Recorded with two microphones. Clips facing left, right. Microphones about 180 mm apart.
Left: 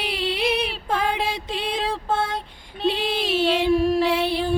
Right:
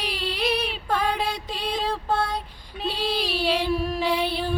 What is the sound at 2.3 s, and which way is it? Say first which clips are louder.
Child singing: left 1 dB; centre (ahead or behind).